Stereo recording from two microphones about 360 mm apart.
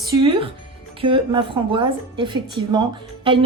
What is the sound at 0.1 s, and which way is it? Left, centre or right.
Music, centre.